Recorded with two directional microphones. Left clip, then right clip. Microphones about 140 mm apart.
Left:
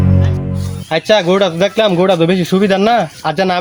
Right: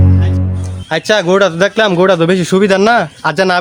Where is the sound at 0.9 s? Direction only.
20° right (ahead or behind).